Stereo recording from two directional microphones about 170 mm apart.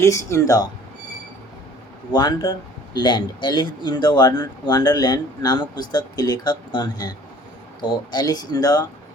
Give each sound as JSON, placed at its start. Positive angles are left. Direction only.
{"t": 0.0, "sound": "speech", "side_deg": 15}
{"t": 2.1, "sound": "speech", "side_deg": 25}